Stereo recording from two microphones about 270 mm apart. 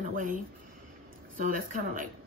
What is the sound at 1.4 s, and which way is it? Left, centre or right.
Speech, right.